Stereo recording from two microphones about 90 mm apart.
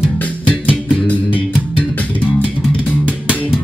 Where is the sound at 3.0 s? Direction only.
10° right (ahead or behind).